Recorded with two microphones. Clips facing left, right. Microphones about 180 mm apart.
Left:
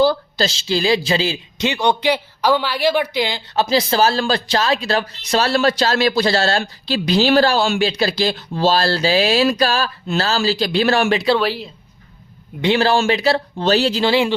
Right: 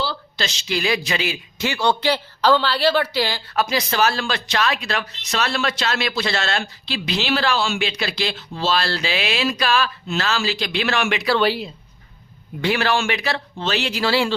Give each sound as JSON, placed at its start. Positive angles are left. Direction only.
{"t": 0.0, "sound": "a sound", "side_deg": 45}
{"t": 0.4, "sound": "a man's voice", "side_deg": 30}
{"t": 11.3, "sound": "speech", "side_deg": 0}
{"t": 12.6, "sound": "a man's voice", "side_deg": 30}
{"t": 14.0, "sound": "speech", "side_deg": 20}